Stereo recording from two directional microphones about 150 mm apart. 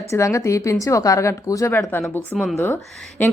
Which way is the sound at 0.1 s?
20° left (ahead or behind).